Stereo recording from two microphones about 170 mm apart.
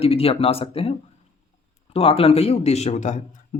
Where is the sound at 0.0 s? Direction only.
35° left (ahead or behind).